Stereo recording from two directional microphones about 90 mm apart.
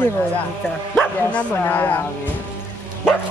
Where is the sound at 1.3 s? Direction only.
15° left (ahead or behind).